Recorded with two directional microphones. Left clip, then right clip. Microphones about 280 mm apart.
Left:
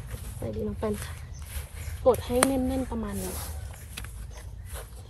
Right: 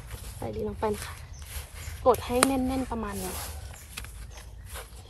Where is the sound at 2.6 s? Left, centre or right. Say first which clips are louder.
Even; right.